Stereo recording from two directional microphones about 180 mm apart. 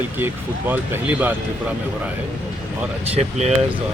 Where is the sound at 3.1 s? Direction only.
35° right (ahead or behind).